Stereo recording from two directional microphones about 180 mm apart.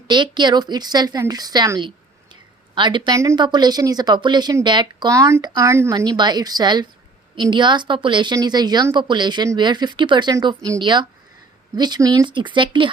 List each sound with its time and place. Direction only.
0.1 s speech: 25° right (ahead or behind)
2.3 s a sound: 25° right (ahead or behind)
3.2 s speech: 20° right (ahead or behind)